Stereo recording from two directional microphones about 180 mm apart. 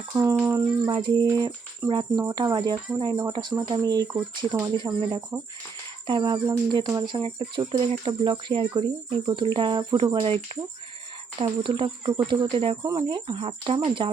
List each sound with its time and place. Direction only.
0.2 s a sound: 10° right (ahead or behind)
0.9 s speech: 25° right (ahead or behind)
11.3 s speech: 30° right (ahead or behind)